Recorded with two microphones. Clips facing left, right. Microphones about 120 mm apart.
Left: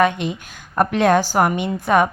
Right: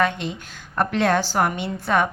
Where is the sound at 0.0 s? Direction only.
15° left (ahead or behind).